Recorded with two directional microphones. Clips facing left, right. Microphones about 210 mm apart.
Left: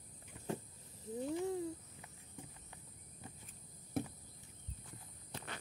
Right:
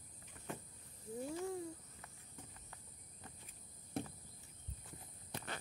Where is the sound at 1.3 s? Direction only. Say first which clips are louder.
Left 6 dB; 20° left (ahead or behind).